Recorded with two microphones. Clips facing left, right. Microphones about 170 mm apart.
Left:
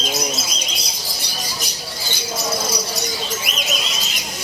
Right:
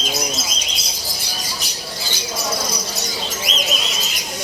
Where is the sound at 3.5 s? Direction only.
60° left (ahead or behind).